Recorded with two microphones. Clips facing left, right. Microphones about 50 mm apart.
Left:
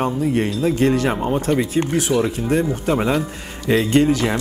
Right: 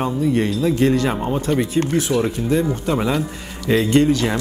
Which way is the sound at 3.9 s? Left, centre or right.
Centre.